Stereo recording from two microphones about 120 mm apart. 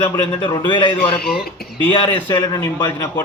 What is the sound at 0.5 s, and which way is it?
Speech, 40° left (ahead or behind).